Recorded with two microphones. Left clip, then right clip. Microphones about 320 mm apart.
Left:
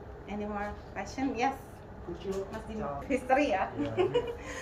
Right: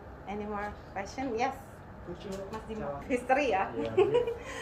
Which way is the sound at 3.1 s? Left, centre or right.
Centre.